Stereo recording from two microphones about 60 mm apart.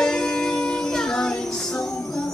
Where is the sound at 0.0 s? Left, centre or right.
Centre.